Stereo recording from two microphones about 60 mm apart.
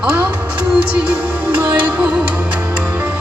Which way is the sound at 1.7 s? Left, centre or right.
Right.